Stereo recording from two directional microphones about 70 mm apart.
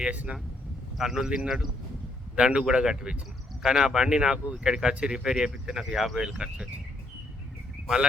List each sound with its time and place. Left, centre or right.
0.0 s speech: centre
0.9 s speech: centre